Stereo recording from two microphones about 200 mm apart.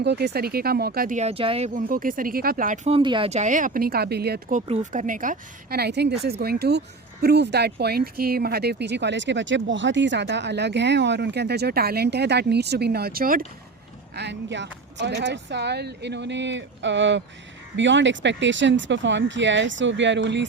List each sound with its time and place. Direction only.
0.0 s speech: 55° right (ahead or behind)
14.2 s speech: 60° right (ahead or behind)